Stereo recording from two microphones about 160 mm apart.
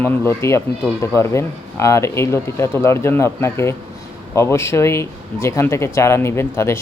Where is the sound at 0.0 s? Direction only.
15° left (ahead or behind).